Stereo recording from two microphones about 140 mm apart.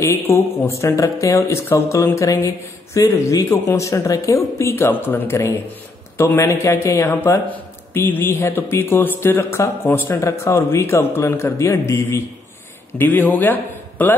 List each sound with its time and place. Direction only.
0.0 s a man's voice: 20° left (ahead or behind)